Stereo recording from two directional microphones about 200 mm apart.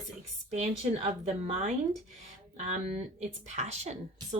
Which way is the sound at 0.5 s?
30° right (ahead or behind).